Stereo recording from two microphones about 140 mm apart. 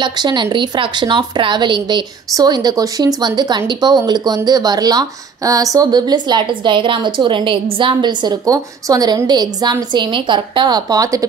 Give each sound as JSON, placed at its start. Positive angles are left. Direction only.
{"t": 0.0, "sound": "a woman's voice", "side_deg": -35}